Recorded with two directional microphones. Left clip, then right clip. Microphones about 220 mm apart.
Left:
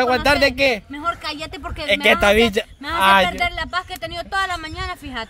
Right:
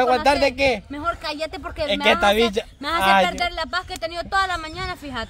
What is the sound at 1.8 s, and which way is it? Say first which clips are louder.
Speech: left 3 dB; 45° left (ahead or behind).